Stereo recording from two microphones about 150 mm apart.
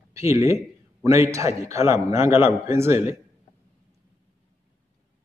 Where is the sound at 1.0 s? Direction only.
20° right (ahead or behind).